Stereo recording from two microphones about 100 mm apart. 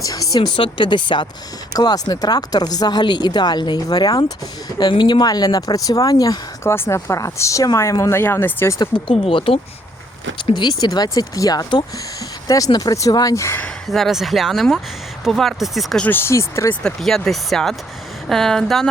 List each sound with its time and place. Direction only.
0.0 s speech: 35° left (ahead or behind)
6.7 s speech: 25° left (ahead or behind)
9.0 s speech: 65° left (ahead or behind)
10.5 s speech: 50° left (ahead or behind); by 13.7 s 25° left (ahead or behind)
13.9 s speech: centre (ahead or behind)
16.0 s speech: 25° left (ahead or behind)
16.8 s speech: 5° left (ahead or behind)